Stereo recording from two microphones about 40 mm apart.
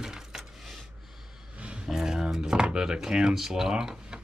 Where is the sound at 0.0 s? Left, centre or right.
Centre.